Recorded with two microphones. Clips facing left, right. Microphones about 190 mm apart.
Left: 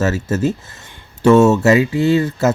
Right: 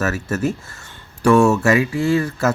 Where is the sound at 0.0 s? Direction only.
25° left (ahead or behind).